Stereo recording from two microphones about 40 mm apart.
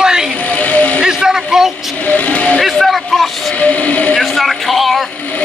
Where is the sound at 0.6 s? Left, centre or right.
Left.